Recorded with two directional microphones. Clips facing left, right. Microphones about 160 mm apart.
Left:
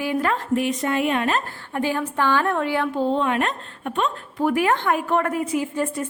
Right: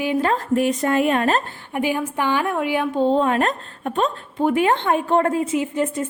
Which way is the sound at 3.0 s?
35° right (ahead or behind).